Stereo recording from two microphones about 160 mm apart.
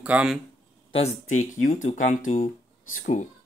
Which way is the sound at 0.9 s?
45° left (ahead or behind).